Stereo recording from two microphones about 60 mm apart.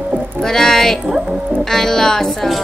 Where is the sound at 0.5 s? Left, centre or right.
Centre.